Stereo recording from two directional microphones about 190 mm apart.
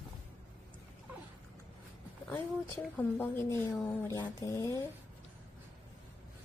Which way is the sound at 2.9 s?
10° left (ahead or behind).